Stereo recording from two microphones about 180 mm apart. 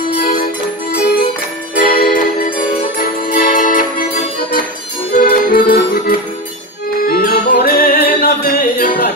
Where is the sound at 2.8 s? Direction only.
50° left (ahead or behind).